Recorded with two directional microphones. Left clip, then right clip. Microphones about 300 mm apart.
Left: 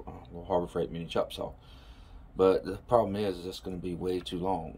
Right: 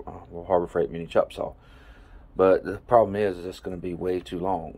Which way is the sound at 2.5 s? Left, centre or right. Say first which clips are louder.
Right 7 dB; right.